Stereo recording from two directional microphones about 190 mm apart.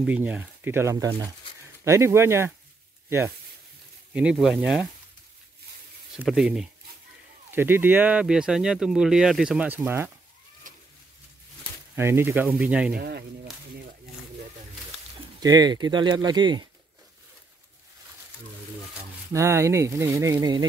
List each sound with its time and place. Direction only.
0.0 s speech: 5° right (ahead or behind)
4.1 s speech: 5° right (ahead or behind)
6.1 s speech: 5° right (ahead or behind)
11.9 s speech: 15° right (ahead or behind)
12.9 s speech: 55° right (ahead or behind)
15.4 s speech: 20° right (ahead or behind)
19.3 s speech: 15° right (ahead or behind)